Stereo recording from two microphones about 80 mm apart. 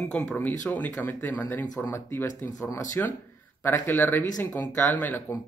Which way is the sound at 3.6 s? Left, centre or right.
Left.